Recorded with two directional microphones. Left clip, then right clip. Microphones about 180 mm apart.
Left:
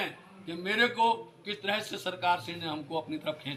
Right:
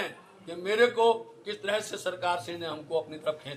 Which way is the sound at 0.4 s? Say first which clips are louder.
Right 3 dB; 25° right (ahead or behind).